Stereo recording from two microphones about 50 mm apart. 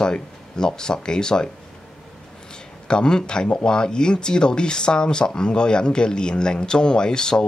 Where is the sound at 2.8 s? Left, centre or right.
Centre.